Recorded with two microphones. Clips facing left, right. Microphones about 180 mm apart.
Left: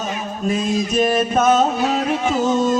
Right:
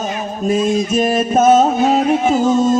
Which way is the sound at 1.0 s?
35° right (ahead or behind).